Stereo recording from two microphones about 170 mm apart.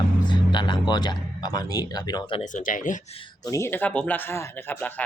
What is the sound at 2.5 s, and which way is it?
Speech, 50° left (ahead or behind).